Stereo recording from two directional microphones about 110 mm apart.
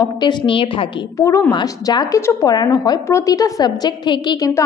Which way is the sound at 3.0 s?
30° left (ahead or behind).